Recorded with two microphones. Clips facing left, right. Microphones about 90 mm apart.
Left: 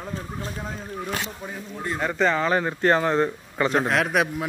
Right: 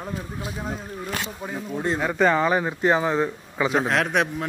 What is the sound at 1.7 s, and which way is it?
Speech, 30° right (ahead or behind).